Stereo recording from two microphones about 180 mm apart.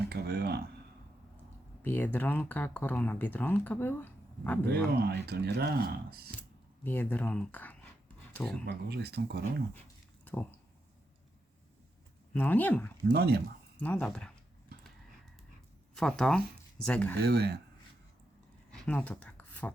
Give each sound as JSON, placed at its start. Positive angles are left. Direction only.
{"t": 0.1, "sound": "speech", "side_deg": -60}
{"t": 1.8, "sound": "speech", "side_deg": 10}
{"t": 4.7, "sound": "speech", "side_deg": -60}
{"t": 6.8, "sound": "speech", "side_deg": 10}
{"t": 8.6, "sound": "speech", "side_deg": -65}
{"t": 10.3, "sound": "a sound", "side_deg": 10}
{"t": 12.3, "sound": "speech", "side_deg": 10}
{"t": 13.1, "sound": "speech", "side_deg": -65}
{"t": 13.8, "sound": "speech", "side_deg": 5}
{"t": 16.0, "sound": "speech", "side_deg": 5}
{"t": 17.2, "sound": "speech", "side_deg": -65}
{"t": 18.7, "sound": "a sound", "side_deg": 5}